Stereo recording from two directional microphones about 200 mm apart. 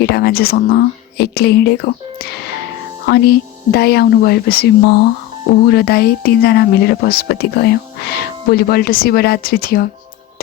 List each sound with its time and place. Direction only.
0.0 s speech: 50° left (ahead or behind)
3.1 s speech: 55° left (ahead or behind)